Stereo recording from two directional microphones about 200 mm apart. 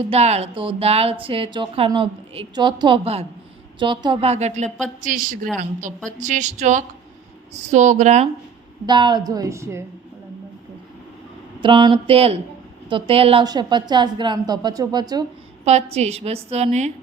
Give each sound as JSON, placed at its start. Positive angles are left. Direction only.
{"t": 0.1, "sound": "a woman's voice", "side_deg": -35}
{"t": 8.9, "sound": "speech", "side_deg": -20}
{"t": 11.6, "sound": "a woman's voice", "side_deg": -25}
{"t": 15.6, "sound": "a woman's voice", "side_deg": -35}